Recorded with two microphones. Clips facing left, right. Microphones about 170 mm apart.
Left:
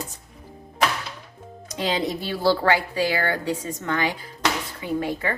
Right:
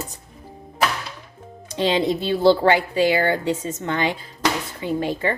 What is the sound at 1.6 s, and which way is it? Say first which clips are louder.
Speech: right 5 dB; 30° right (ahead or behind).